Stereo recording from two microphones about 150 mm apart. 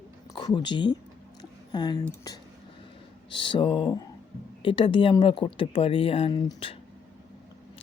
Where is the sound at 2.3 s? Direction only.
25° left (ahead or behind).